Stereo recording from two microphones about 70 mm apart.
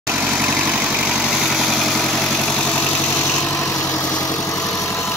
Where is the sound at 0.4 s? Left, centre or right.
Centre.